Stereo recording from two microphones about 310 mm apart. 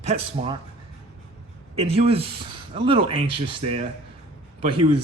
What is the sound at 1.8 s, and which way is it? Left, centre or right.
A man's voice, centre.